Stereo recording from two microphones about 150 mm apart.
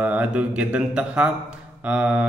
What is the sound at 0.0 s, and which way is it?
A man's voice, 10° right (ahead or behind).